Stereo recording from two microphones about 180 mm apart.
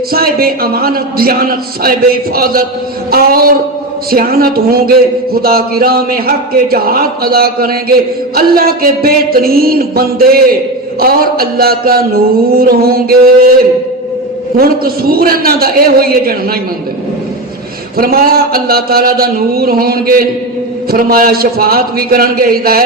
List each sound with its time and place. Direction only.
0.1 s speech: 55° right (ahead or behind)
14.5 s speech: 55° right (ahead or behind)
17.9 s speech: 55° right (ahead or behind)